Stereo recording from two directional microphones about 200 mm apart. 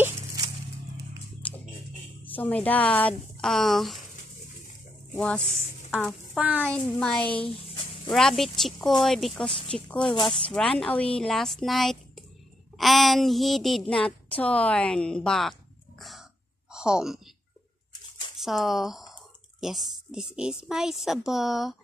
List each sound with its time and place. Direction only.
0.4 s a sound: 20° right (ahead or behind)
1.4 s music: 5° left (ahead or behind)
2.2 s a woman's voice: 10° left (ahead or behind)
5.1 s a woman's voice: 5° left (ahead or behind)
16.0 s throat clearing: centre (ahead or behind)
16.7 s speech: 5° right (ahead or behind)
18.4 s a woman's voice: centre (ahead or behind)